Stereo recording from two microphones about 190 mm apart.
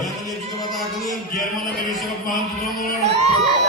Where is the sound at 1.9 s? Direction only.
Centre (ahead or behind).